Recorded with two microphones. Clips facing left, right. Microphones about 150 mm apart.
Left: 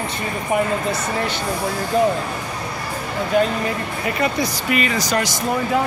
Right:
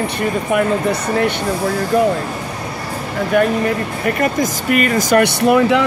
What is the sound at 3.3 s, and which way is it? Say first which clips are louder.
Speech: right 3 dB; 60° right (ahead or behind).